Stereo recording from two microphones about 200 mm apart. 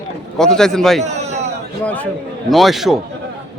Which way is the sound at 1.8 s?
5° left (ahead or behind).